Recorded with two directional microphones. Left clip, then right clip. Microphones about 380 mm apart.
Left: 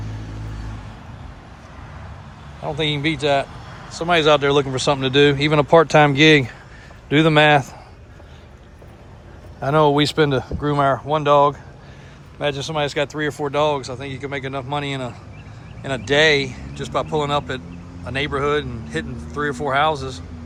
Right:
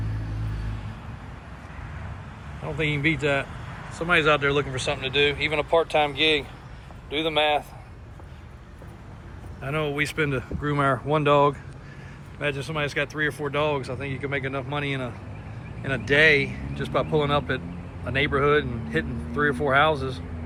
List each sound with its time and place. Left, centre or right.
2.6 s speech: centre
5.1 s speech: left
7.1 s a man's voice: left
9.6 s speech: left
10.2 s speech: centre